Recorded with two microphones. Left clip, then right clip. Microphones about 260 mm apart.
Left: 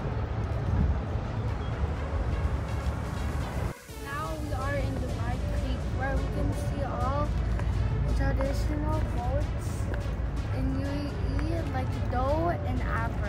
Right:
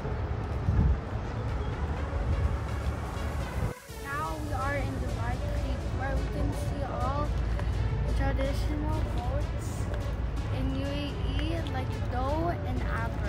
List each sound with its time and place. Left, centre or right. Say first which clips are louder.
4.1 s music: right 1 dB; centre
11.7 s vehicle: left 2 dB; centre